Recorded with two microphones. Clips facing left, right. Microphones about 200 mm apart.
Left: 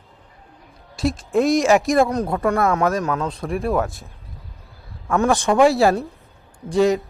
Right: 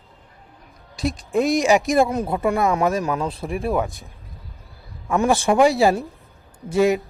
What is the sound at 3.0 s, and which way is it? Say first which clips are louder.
Speech: even; 15° right (ahead or behind).